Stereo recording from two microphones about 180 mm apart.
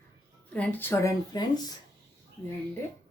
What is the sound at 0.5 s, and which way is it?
Speech, 10° left (ahead or behind).